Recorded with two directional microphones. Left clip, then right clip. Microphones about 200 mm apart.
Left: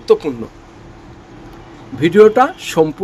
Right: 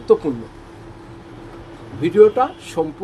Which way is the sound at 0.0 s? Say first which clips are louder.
Left 2 dB; 40° left (ahead or behind).